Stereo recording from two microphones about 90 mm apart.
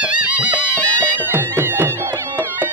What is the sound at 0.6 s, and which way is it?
Music, 20° left (ahead or behind).